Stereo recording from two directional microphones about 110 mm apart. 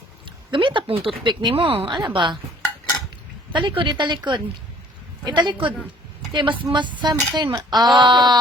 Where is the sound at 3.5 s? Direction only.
50° right (ahead or behind).